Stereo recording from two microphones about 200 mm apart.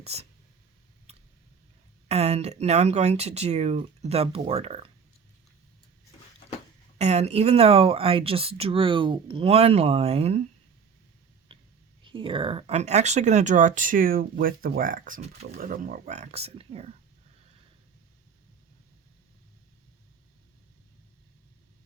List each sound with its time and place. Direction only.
0.0 s speech: 30° right (ahead or behind)
2.0 s speech: 30° right (ahead or behind)
7.0 s speech: 35° right (ahead or behind)
11.5 s a sound: 25° right (ahead or behind)
12.0 s speech: 25° right (ahead or behind)